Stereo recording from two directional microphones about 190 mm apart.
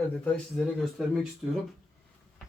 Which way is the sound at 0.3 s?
Centre (ahead or behind).